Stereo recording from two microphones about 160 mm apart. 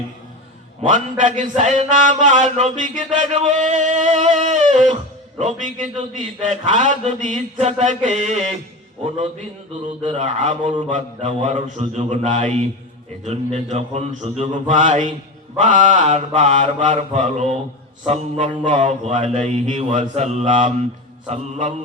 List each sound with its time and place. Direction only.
0.8 s music: 50° right (ahead or behind)
10.2 s music: 50° right (ahead or behind)